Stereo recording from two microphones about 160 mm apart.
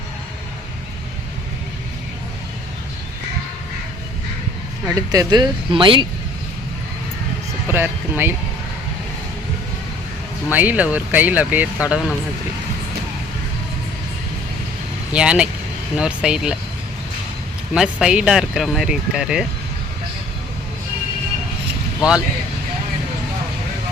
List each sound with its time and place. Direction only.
4.9 s speech: 25° right (ahead or behind)
7.7 s speech: 15° right (ahead or behind)
10.5 s speech: 10° right (ahead or behind)
15.1 s speech: 5° right (ahead or behind)
17.7 s speech: 5° right (ahead or behind)